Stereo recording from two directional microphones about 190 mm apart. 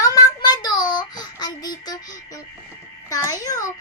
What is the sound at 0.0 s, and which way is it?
Child singing, 20° left (ahead or behind).